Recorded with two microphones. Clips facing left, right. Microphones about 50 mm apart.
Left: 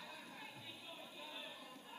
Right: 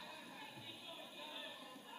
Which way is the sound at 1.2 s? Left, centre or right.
Left.